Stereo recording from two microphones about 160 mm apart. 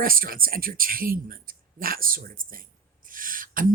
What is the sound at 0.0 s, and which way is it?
Speech, 65° right (ahead or behind).